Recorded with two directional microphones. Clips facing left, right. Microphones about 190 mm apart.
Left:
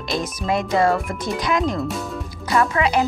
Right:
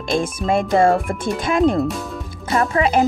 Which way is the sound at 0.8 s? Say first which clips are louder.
Right 3 dB; 30° right (ahead or behind).